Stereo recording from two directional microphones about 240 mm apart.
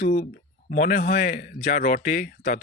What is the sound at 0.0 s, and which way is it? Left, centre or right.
A man's voice, left.